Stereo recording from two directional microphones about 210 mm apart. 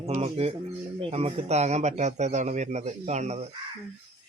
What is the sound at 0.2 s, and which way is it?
Speech, 30° right (ahead or behind).